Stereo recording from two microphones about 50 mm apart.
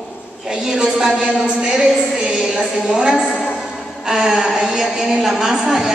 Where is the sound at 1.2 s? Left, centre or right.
Centre.